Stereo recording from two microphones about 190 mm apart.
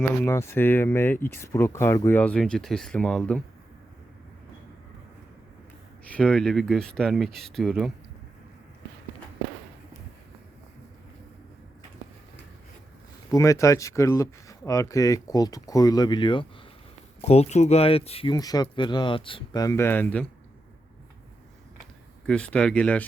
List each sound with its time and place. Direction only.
0.2 s speech: 15° left (ahead or behind)
6.1 s speech: 5° left (ahead or behind)
13.3 s speech: 15° left (ahead or behind)
22.3 s speech: 5° left (ahead or behind)